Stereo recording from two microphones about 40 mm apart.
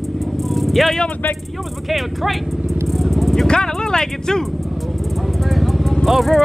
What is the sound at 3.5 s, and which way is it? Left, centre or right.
Speech, centre.